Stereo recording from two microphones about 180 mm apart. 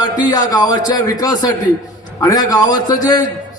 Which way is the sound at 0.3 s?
20° left (ahead or behind).